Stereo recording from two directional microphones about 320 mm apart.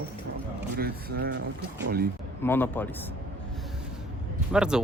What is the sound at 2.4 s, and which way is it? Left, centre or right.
Speech, centre.